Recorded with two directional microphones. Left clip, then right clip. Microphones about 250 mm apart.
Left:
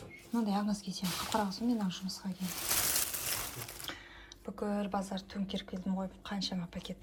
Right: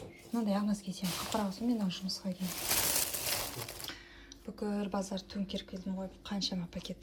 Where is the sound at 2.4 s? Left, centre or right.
Centre.